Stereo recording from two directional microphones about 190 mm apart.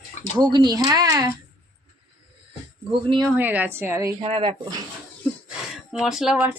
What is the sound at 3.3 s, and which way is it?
Speech, 10° right (ahead or behind).